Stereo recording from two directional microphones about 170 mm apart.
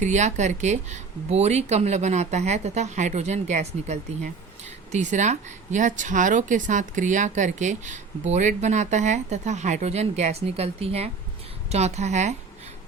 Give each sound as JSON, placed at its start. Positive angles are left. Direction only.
{"t": 0.0, "sound": "a woman's voice", "side_deg": -45}